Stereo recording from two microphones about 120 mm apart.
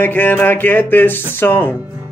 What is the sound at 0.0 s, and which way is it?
Speech, 15° left (ahead or behind).